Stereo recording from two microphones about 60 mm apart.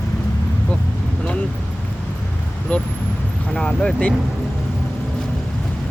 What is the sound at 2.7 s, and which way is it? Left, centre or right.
Vehicle, left.